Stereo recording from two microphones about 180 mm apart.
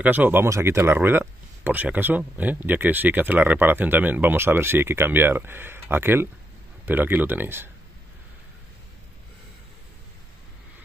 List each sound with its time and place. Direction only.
0.0 s speech: 10° right (ahead or behind)